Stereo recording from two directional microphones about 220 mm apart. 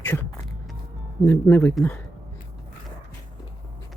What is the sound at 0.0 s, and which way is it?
Music, 10° left (ahead or behind).